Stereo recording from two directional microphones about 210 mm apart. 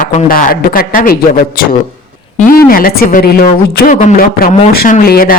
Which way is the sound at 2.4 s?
45° left (ahead or behind).